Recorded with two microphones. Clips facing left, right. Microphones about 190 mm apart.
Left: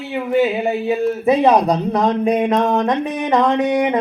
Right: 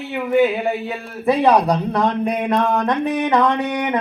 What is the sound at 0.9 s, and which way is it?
A man's voice, 20° left (ahead or behind).